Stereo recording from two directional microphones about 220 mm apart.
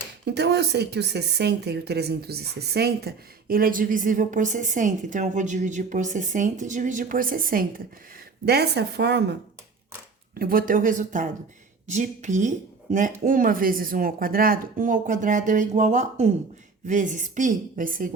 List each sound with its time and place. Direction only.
0.3 s a woman's voice: 50° right (ahead or behind)
10.3 s speech: 40° right (ahead or behind)